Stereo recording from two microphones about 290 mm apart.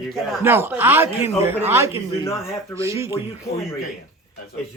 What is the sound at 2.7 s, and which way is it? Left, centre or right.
Speech, centre.